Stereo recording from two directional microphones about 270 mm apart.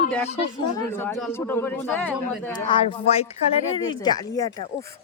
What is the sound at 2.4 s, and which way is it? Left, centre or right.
Speech, centre.